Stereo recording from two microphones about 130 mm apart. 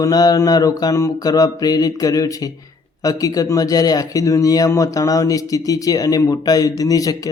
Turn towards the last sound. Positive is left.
turn(degrees=30)  # may be behind; listen again after turning